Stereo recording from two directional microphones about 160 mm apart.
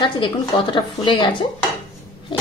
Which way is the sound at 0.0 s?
30° left (ahead or behind).